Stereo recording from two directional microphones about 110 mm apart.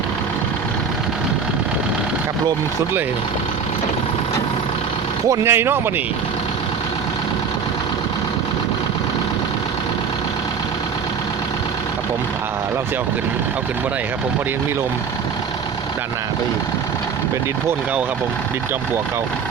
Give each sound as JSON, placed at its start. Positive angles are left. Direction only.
{"t": 5.3, "sound": "speech", "side_deg": -25}